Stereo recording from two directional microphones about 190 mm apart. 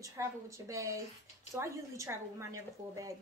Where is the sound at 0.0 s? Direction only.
15° right (ahead or behind).